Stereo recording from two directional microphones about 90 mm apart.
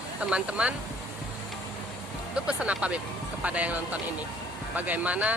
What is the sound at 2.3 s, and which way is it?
Speech, 10° right (ahead or behind).